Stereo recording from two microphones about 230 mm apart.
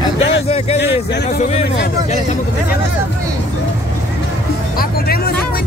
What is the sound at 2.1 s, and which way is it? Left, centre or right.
Speech, left.